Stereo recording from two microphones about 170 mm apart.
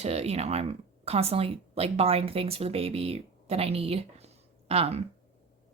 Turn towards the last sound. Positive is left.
turn(degrees=-35)  # may be behind; listen again after turning